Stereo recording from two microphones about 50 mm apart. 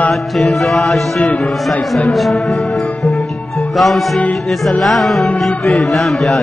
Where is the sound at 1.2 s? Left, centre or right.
Left.